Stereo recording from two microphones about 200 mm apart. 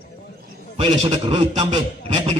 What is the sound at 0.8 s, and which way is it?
A man's voice, 25° right (ahead or behind).